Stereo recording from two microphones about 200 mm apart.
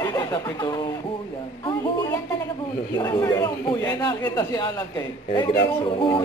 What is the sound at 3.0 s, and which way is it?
Speech, 20° left (ahead or behind).